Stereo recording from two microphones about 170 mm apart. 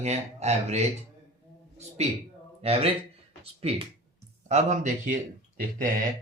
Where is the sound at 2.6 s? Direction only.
35° right (ahead or behind).